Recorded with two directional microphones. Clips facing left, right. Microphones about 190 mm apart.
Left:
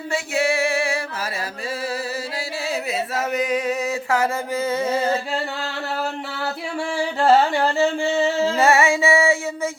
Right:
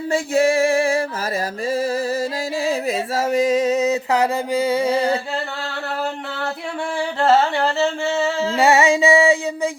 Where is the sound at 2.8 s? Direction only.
30° right (ahead or behind).